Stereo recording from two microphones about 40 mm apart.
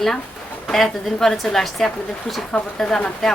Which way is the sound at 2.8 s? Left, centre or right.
Left.